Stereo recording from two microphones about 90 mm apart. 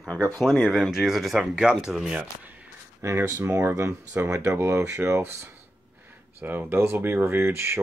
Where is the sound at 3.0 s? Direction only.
30° right (ahead or behind).